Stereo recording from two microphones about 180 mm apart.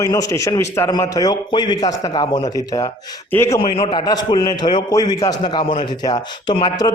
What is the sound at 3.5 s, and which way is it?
A man's voice, 30° left (ahead or behind).